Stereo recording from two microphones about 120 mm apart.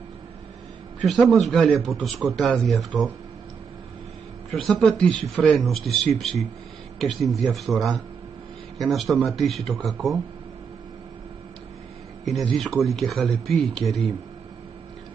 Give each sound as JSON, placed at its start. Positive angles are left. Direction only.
{"t": 1.2, "sound": "a man's voice", "side_deg": 0}
{"t": 4.5, "sound": "a man's voice", "side_deg": 0}
{"t": 12.5, "sound": "a man's voice", "side_deg": 0}